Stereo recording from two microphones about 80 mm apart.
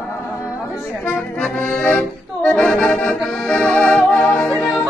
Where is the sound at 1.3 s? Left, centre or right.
Centre.